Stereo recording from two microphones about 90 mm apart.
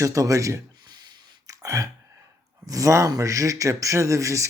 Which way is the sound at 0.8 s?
50° right (ahead or behind).